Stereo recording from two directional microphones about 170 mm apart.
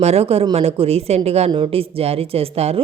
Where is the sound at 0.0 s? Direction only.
35° right (ahead or behind).